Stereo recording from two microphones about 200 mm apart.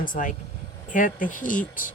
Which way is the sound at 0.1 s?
40° left (ahead or behind).